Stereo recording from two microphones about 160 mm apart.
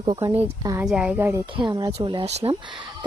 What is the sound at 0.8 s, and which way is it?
Speech, 5° right (ahead or behind).